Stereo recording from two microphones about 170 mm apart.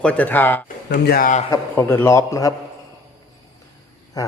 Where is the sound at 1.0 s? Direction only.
60° left (ahead or behind).